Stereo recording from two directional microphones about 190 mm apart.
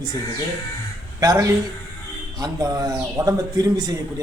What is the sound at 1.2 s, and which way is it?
A man's voice, 15° right (ahead or behind).